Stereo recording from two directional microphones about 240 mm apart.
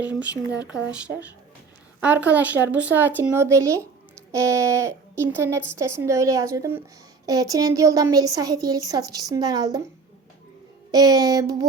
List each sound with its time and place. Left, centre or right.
0.0 s a woman's voice: centre
10.9 s a woman's voice: centre